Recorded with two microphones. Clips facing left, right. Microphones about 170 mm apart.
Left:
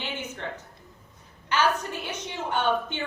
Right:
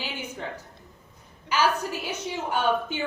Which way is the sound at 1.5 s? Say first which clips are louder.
Right 1 dB; 5° right (ahead or behind).